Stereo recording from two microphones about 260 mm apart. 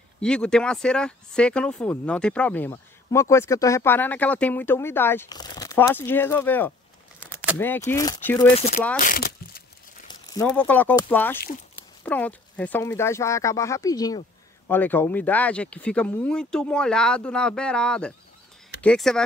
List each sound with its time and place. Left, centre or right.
0.2 s speech: centre
9.0 s speech: left
10.3 s speech: centre